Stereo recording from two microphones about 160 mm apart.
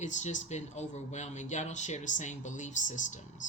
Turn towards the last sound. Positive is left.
turn(degrees=50)  # may be behind; listen again after turning